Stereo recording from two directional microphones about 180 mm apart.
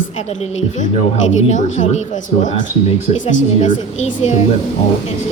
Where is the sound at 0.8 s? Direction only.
40° left (ahead or behind).